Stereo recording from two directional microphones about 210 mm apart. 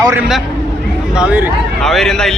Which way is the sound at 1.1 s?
5° right (ahead or behind).